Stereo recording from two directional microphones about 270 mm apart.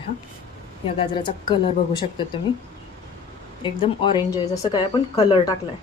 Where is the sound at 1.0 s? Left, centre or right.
Centre.